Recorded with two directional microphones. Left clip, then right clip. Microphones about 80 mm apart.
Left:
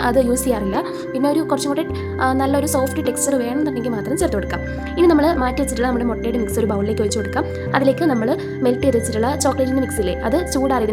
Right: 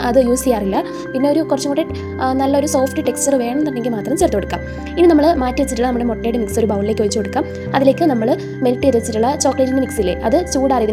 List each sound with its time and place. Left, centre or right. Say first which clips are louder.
0.0 s speech: right 3 dB; centre
0.5 s speech: right 3 dB; right